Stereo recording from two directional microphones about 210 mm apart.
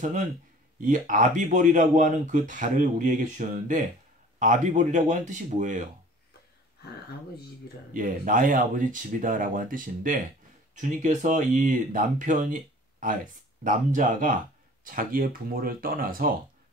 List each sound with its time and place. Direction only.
0.0 s speech: 35° right (ahead or behind)
7.9 s speech: 40° right (ahead or behind)